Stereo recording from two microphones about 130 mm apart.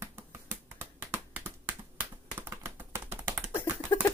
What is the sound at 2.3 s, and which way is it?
Computer keyboard, 15° right (ahead or behind).